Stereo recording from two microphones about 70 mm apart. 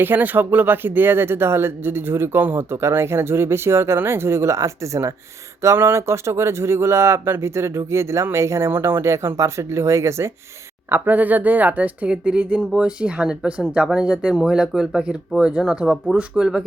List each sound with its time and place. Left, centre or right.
0.0 s speech: right
10.8 s speech: right; by 16.6 s centre